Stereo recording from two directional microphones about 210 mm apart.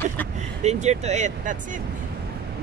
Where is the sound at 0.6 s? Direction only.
30° right (ahead or behind).